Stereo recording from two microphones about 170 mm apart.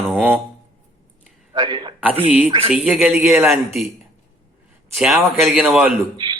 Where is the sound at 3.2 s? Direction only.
15° right (ahead or behind).